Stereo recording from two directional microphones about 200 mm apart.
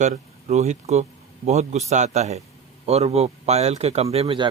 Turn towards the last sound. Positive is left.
turn(degrees=-30)  # may be behind; listen again after turning